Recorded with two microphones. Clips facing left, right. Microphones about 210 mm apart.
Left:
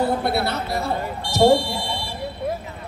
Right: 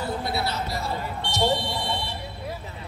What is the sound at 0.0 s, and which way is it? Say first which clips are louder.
A man's voice: left 7 dB; 60° left (ahead or behind).